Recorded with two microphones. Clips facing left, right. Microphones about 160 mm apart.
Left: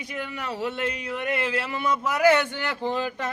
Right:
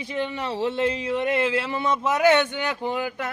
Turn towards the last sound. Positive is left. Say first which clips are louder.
# even
turn(degrees=-10)  # may be behind; listen again after turning